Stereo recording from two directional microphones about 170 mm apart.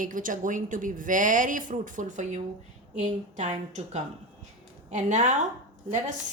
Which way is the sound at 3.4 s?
40° right (ahead or behind).